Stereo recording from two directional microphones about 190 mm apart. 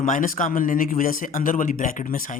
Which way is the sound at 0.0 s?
45° left (ahead or behind).